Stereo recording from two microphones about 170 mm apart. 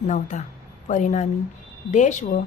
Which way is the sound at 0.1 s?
45° left (ahead or behind).